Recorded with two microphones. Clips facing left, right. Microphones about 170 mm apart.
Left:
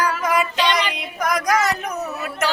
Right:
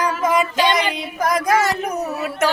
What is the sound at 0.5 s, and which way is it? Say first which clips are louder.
Child singing: right 3 dB; 45° right (ahead or behind).